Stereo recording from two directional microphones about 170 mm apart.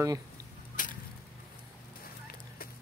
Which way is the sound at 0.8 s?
50° left (ahead or behind).